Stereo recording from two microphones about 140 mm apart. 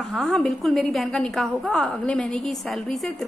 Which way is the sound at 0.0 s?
Centre (ahead or behind).